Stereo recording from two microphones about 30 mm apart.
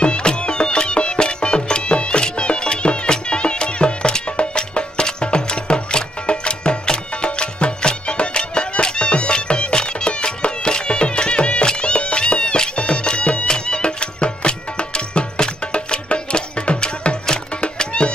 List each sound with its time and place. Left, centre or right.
0.0 s music: left